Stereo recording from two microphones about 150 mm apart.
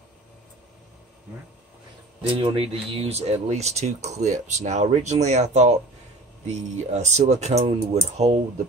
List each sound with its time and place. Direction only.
2.2 s speech: 40° right (ahead or behind)